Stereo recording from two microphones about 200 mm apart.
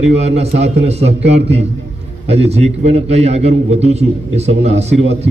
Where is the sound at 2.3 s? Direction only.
30° right (ahead or behind).